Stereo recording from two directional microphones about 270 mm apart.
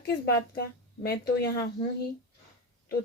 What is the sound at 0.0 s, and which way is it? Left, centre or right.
A woman's voice, left.